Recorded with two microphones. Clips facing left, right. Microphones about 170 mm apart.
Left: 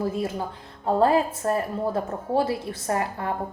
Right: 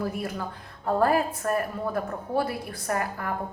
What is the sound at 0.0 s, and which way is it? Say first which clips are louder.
A woman's voice: left 4 dB; 20° left (ahead or behind).